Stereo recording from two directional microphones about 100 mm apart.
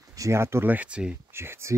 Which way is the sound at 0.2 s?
25° right (ahead or behind).